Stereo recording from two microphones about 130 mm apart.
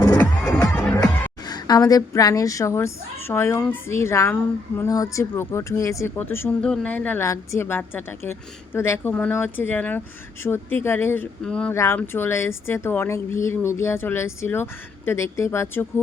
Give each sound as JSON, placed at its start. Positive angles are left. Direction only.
{"t": 0.7, "sound": "music", "side_deg": 10}
{"t": 1.5, "sound": "speech", "side_deg": 30}
{"t": 11.7, "sound": "speech", "side_deg": 20}